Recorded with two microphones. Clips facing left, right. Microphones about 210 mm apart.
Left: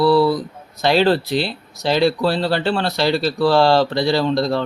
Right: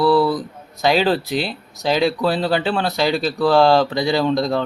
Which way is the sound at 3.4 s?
5° left (ahead or behind).